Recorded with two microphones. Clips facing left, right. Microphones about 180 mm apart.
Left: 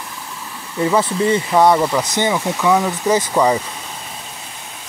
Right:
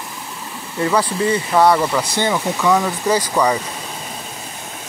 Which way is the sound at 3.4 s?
25° left (ahead or behind).